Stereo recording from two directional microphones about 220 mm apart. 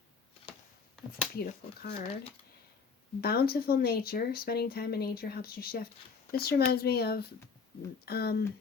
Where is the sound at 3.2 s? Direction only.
45° left (ahead or behind).